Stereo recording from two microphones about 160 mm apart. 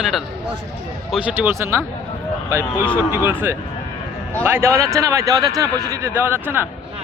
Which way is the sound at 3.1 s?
15° right (ahead or behind).